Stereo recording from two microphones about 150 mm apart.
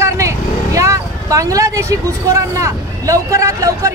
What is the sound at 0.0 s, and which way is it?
Speech, 20° right (ahead or behind).